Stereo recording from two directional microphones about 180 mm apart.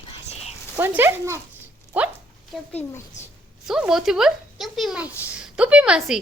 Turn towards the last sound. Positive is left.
turn(degrees=-5)  # may be behind; listen again after turning